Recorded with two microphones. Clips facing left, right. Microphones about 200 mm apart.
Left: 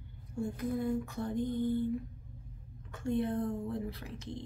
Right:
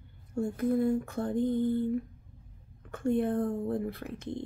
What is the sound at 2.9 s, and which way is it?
Speech, 55° right (ahead or behind).